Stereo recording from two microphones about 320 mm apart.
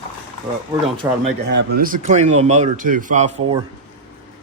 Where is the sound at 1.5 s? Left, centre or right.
Right.